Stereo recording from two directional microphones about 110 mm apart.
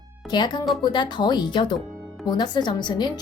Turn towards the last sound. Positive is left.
turn(degrees=40)  # may be behind; listen again after turning